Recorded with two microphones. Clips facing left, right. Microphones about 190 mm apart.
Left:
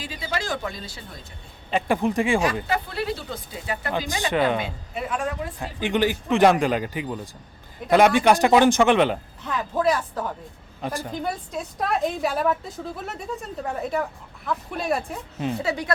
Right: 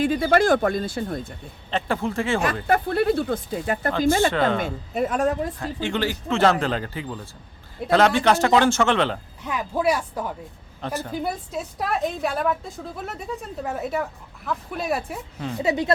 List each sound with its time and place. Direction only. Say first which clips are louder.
0.0 s speech: right 12 dB; 55° right (ahead or behind)
1.7 s speech: left 3 dB; 15° left (ahead or behind)
2.6 s speech: right 6 dB; 55° right (ahead or behind)
3.9 s speech: right 4 dB; 15° left (ahead or behind)
4.6 s a man's voice: right 6 dB; 45° right (ahead or behind)
5.5 s speech: left 2 dB; 15° left (ahead or behind)
9.4 s speech: even; 10° right (ahead or behind)
10.8 s speech: even; 10° left (ahead or behind)
11.1 s a woman's voice: right 1 dB; 5° right (ahead or behind)
15.6 s speech: right 4 dB; 20° right (ahead or behind)